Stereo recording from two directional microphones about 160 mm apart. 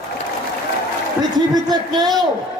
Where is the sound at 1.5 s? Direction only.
25° right (ahead or behind).